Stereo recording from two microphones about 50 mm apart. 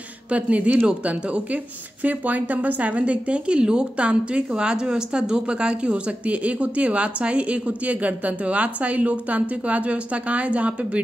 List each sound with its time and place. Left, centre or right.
0.3 s speech: right